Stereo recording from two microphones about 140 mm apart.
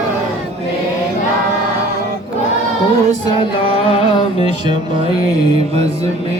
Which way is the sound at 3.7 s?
45° left (ahead or behind).